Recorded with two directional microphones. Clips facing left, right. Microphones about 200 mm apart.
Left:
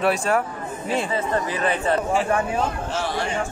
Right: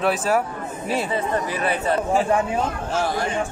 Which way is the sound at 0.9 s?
10° right (ahead or behind).